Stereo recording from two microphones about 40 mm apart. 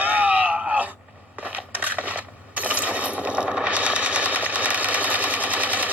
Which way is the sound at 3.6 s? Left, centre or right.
Right.